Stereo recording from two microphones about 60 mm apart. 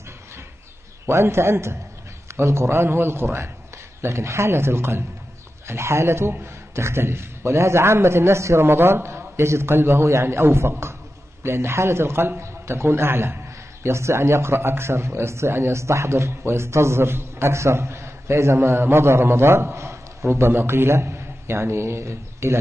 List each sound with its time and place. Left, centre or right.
1.0 s a man's voice: right
4.0 s a man's voice: right
8.6 s a man's voice: right